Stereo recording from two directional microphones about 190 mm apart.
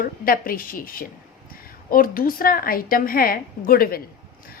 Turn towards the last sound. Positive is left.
turn(degrees=50)  # may be behind; listen again after turning